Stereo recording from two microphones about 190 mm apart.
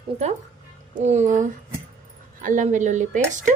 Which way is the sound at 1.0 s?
40° right (ahead or behind).